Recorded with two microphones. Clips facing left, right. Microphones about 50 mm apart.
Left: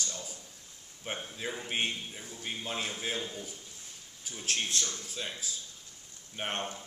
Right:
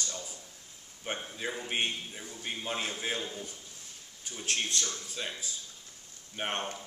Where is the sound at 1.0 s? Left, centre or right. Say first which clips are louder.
Right 1 dB; centre.